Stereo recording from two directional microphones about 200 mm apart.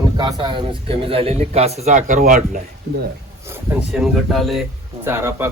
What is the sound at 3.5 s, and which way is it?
Speech, 5° right (ahead or behind).